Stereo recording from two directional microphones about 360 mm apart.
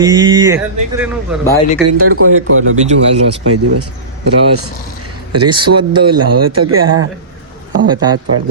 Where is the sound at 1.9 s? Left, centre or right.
Right.